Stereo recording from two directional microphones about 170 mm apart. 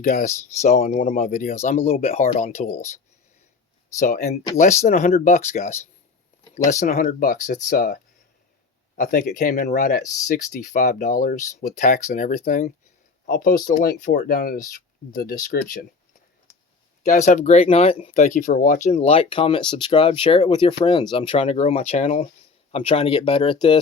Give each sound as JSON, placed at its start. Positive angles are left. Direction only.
{"t": 0.0, "sound": "speech", "side_deg": 50}
{"t": 3.9, "sound": "speech", "side_deg": 55}
{"t": 9.0, "sound": "speech", "side_deg": 55}
{"t": 13.7, "sound": "speech", "side_deg": 70}
{"t": 17.0, "sound": "speech", "side_deg": 45}